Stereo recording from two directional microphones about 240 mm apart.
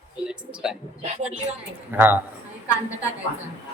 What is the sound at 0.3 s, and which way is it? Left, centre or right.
Speech, centre.